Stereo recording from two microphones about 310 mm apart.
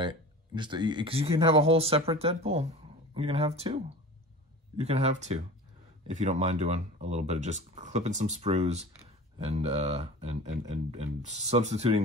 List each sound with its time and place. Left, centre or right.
0.0 s speech: centre